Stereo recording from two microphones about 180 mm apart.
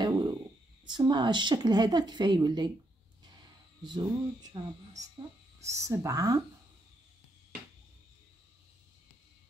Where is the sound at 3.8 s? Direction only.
25° right (ahead or behind).